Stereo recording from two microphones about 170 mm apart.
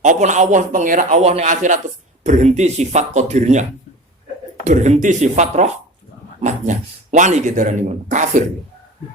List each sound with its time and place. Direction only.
0.0 s speech: 45° right (ahead or behind)